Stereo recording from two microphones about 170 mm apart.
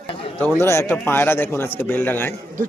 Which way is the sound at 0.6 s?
15° left (ahead or behind).